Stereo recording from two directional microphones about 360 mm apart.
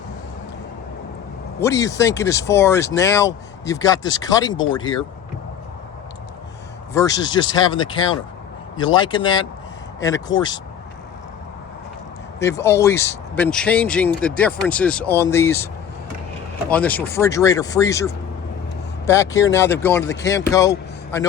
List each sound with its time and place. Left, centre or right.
1.6 s speech: centre
6.9 s speech: centre
12.4 s speech: centre